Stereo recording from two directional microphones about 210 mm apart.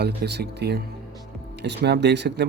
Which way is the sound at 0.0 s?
50° right (ahead or behind).